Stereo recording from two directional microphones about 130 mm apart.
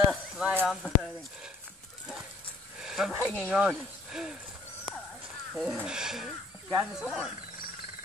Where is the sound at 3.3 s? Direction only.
10° left (ahead or behind).